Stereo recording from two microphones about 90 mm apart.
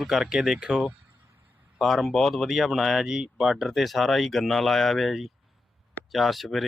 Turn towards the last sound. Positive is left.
turn(degrees=0)  # may be behind; listen again after turning